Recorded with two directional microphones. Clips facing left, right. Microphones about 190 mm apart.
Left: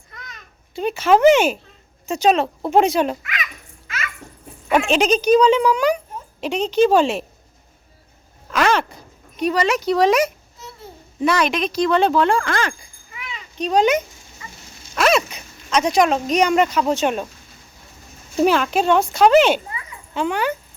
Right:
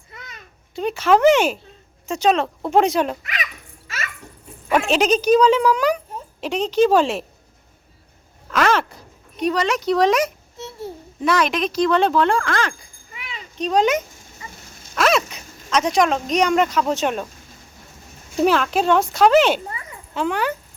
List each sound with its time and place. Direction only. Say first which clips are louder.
0.8 s speech: left 1 dB; 5° left (ahead or behind)
4.9 s speech: even; centre (ahead or behind)
8.4 s a sound: even; centre (ahead or behind)
9.4 s speech: left 1 dB; 5° left (ahead or behind)
18.4 s speech: left 1 dB; centre (ahead or behind)